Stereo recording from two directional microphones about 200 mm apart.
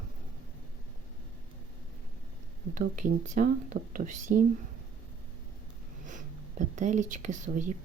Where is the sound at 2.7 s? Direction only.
40° right (ahead or behind).